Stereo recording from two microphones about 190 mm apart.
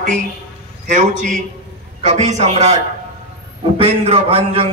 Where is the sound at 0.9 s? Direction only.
40° right (ahead or behind).